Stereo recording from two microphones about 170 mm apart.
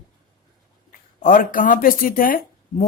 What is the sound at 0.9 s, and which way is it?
Speech, 50° left (ahead or behind).